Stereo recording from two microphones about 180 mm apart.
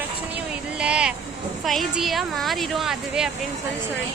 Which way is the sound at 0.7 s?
5° right (ahead or behind).